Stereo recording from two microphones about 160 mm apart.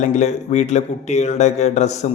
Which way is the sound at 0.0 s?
45° left (ahead or behind).